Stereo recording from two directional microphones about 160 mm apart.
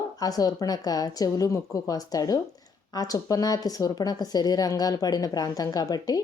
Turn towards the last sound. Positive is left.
turn(degrees=25)  # may be behind; listen again after turning